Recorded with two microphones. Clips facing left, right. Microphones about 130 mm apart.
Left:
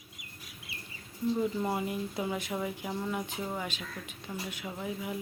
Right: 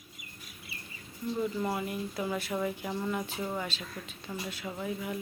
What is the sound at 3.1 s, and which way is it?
Speech, 15° left (ahead or behind).